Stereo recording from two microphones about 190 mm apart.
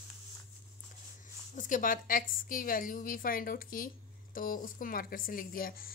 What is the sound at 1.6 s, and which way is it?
Speech, 45° left (ahead or behind).